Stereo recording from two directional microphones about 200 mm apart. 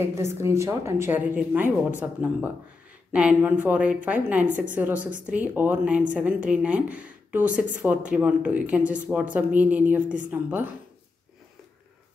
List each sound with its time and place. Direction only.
0.0 s speech: 15° right (ahead or behind)
4.5 s a woman's voice: 40° right (ahead or behind)
4.7 s speech: 5° right (ahead or behind)
10.0 s a woman's voice: 40° right (ahead or behind)
10.3 s speech: 10° right (ahead or behind)